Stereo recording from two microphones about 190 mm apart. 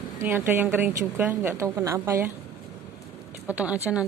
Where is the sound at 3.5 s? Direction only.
5° right (ahead or behind).